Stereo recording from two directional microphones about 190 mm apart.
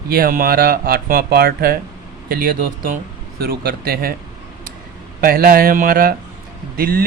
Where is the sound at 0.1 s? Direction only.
50° right (ahead or behind).